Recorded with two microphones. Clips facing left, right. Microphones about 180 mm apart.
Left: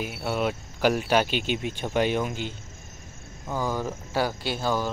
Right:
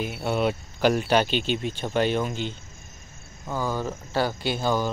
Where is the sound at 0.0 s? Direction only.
5° left (ahead or behind).